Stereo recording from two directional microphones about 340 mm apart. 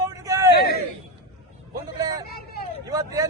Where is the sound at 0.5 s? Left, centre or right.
Left.